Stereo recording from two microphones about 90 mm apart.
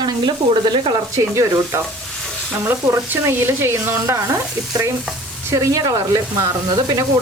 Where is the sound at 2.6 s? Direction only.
25° right (ahead or behind).